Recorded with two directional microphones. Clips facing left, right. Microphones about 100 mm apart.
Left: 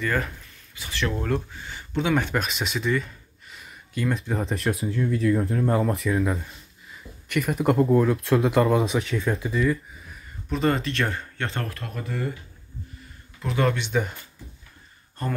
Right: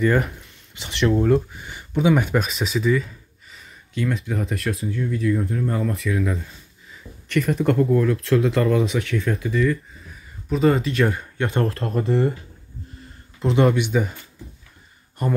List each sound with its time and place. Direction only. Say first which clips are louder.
0.0 s speech: right 7 dB; 20° right (ahead or behind); by 3.6 s centre (ahead or behind)
4.3 s speech: even; 30° left (ahead or behind)
6.9 s a sound: right 5 dB; 5° left (ahead or behind)
7.7 s speech: left 1 dB; 25° left (ahead or behind)
10.5 s speech: right 5 dB; 5° right (ahead or behind)
11.6 s speech: right 11 dB; 30° right (ahead or behind)
13.4 s speech: right 6 dB; 25° right (ahead or behind)
13.7 s speech: right 4 dB; 5° right (ahead or behind)
15.2 s speech: right 5 dB; 15° right (ahead or behind)